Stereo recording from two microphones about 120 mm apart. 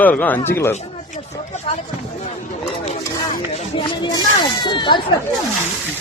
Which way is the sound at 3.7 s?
35° left (ahead or behind).